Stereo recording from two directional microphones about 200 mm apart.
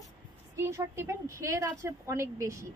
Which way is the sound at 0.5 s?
15° right (ahead or behind).